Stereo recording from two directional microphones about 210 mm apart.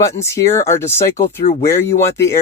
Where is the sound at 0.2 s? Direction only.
15° left (ahead or behind).